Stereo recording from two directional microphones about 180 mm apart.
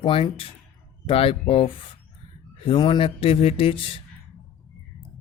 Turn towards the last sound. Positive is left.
turn(degrees=30)  # may be behind; listen again after turning